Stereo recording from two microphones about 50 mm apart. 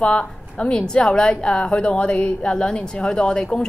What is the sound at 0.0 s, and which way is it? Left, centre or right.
Speech, left.